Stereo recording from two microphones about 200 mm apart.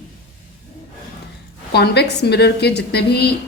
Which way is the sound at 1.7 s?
55° left (ahead or behind).